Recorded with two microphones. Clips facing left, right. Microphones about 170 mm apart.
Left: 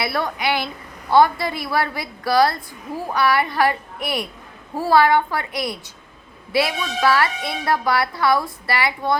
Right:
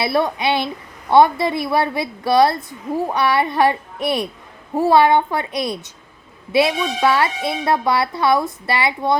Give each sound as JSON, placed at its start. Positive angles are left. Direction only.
{"t": 0.0, "sound": "a woman's voice", "side_deg": -25}